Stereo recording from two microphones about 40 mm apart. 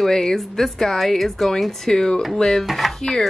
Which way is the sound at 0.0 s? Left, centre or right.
Centre.